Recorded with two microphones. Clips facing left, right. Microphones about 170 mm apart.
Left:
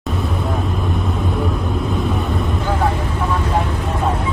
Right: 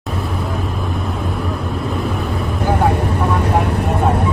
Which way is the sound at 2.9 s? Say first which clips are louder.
Right 3 dB; 65° right (ahead or behind).